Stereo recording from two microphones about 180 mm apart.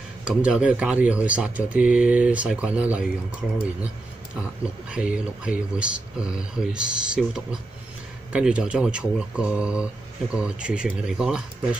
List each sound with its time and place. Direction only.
0.2 s speech: 5° right (ahead or behind)
4.9 s speech: 5° right (ahead or behind)